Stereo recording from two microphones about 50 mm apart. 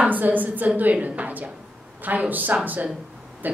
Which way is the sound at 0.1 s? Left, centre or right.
Right.